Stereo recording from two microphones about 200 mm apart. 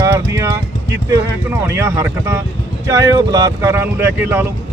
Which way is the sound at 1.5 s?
10° right (ahead or behind).